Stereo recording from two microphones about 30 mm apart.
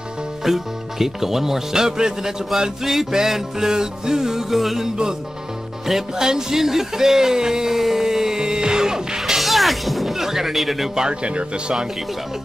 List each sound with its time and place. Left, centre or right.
0.4 s speech: centre
2.8 s speech: centre
4.6 s a man's voice: centre
4.8 s music: right
6.1 s speech: centre
9.2 s music: centre
10.1 s a sound: centre
10.5 s a man's voice: centre
11.2 s speech: right